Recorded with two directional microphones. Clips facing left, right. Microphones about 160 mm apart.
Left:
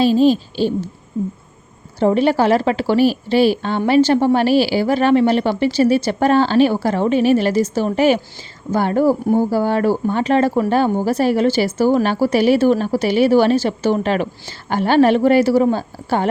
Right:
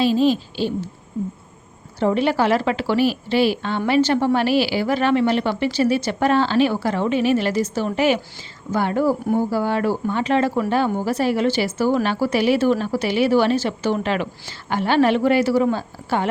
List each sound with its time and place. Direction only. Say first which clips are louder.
0.0 s speech: left 4 dB; 40° left (ahead or behind)
2.0 s speech: left 4 dB; 35° left (ahead or behind)